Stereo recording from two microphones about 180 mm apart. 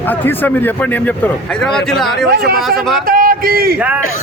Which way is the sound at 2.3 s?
60° right (ahead or behind).